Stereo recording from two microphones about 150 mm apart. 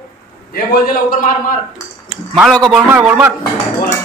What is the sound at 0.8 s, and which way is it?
Speech, 65° left (ahead or behind).